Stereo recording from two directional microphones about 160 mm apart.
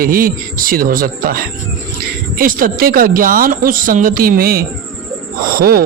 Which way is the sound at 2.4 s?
60° right (ahead or behind).